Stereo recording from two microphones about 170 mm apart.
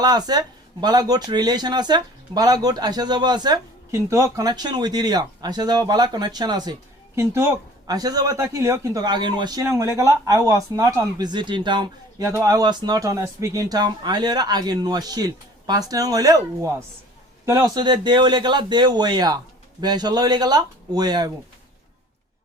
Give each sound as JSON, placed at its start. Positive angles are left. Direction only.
{"t": 0.0, "sound": "speech", "side_deg": -25}